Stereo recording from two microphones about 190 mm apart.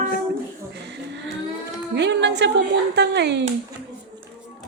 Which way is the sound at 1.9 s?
65° right (ahead or behind).